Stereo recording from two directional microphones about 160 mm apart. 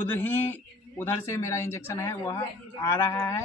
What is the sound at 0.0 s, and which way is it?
A man's voice, 15° left (ahead or behind).